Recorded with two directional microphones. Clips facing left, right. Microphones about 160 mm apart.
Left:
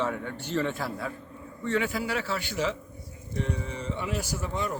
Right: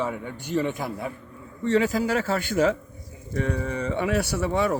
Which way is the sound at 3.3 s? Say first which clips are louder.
Right 6 dB; 65° right (ahead or behind).